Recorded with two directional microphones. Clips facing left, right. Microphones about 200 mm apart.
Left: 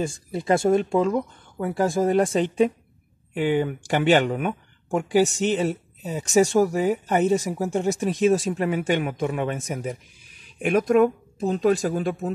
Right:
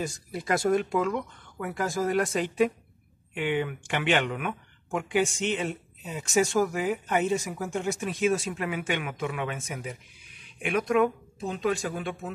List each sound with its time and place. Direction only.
0.0 s speech: 25° left (ahead or behind)